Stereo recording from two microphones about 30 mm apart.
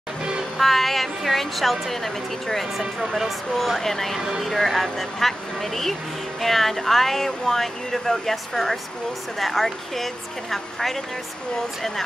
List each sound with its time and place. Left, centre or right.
0.6 s a woman's voice: centre